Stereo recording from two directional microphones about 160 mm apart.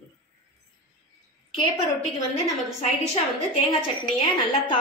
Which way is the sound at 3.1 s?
40° left (ahead or behind).